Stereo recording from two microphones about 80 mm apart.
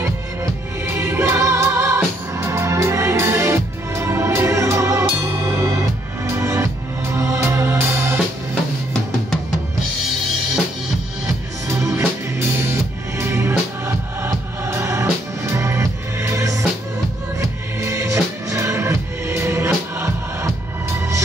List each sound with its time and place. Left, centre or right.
0.0 s music: right
11.6 s music: right